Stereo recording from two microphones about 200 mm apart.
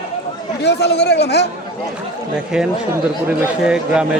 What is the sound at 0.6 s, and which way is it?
Speech, 55° left (ahead or behind).